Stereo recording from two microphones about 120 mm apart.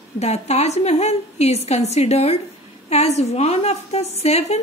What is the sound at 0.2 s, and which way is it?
A woman's voice, 65° left (ahead or behind).